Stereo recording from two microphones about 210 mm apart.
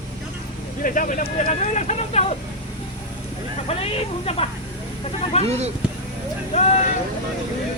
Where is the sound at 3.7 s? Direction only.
25° left (ahead or behind).